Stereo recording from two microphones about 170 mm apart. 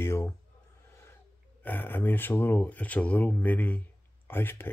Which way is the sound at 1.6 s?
10° left (ahead or behind).